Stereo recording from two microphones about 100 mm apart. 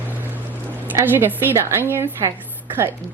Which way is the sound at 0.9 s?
20° right (ahead or behind).